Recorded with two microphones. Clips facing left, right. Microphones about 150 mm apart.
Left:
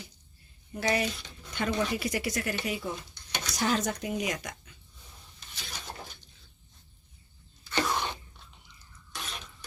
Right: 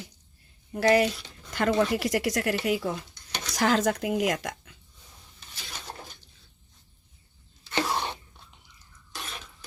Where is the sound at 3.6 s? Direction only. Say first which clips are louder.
Right 5 dB; 90° right.